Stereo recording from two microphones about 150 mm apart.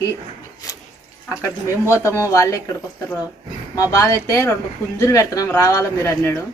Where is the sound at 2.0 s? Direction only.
20° left (ahead or behind).